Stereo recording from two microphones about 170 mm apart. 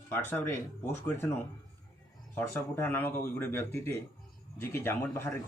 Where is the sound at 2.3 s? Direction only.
10° left (ahead or behind).